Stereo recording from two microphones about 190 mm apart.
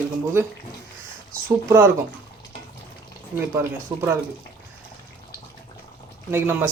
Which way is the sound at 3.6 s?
15° right (ahead or behind).